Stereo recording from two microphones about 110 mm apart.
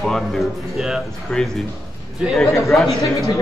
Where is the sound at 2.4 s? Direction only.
Centre (ahead or behind).